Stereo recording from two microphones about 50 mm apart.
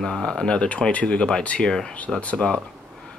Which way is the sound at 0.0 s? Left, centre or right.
Centre.